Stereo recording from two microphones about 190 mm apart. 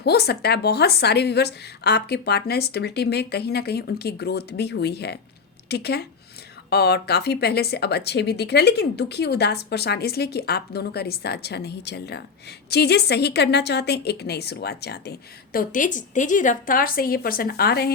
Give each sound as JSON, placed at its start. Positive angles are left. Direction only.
{"t": 0.0, "sound": "speech", "side_deg": 55}
{"t": 15.5, "sound": "a woman's voice", "side_deg": 45}